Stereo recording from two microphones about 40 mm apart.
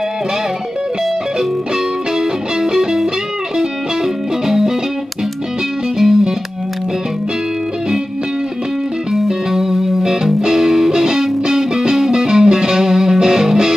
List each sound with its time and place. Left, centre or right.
2.6 s music: centre
4.5 s music: centre
5.9 s music: centre
9.1 s music: centre